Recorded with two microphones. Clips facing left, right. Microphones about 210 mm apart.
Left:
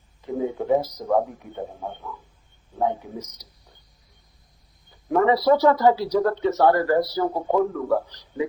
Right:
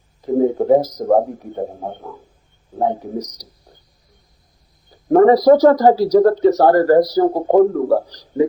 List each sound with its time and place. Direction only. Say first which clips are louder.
0.2 s speech: right 10 dB; 40° right (ahead or behind)
4.9 s speech: right 9 dB; 45° right (ahead or behind)